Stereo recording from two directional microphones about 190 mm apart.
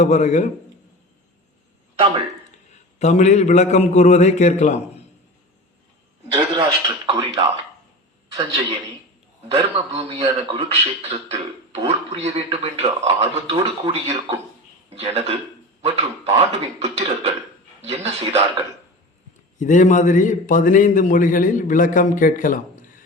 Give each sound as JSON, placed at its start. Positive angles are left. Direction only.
{"t": 0.0, "sound": "a man's voice", "side_deg": 35}
{"t": 3.0, "sound": "a man's voice", "side_deg": 35}
{"t": 6.3, "sound": "a man's voice", "side_deg": -25}
{"t": 9.5, "sound": "a man's voice", "side_deg": -30}
{"t": 19.5, "sound": "a man's voice", "side_deg": 40}